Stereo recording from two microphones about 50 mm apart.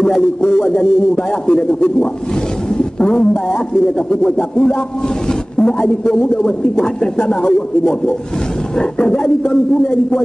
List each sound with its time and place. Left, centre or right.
0.4 s speech: centre